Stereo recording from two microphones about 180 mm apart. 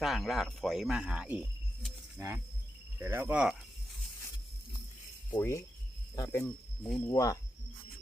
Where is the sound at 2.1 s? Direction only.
15° right (ahead or behind).